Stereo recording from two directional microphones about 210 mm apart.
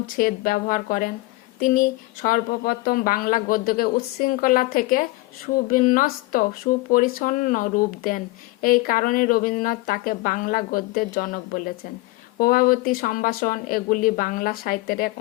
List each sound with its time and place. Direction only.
0.2 s a woman's voice: 40° left (ahead or behind)